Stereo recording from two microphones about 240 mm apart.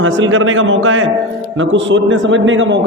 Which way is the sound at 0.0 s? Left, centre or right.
Right.